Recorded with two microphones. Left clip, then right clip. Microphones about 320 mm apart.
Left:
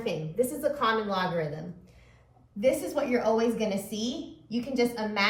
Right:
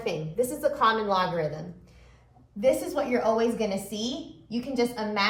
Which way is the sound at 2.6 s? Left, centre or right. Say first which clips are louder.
Right 2 dB; centre.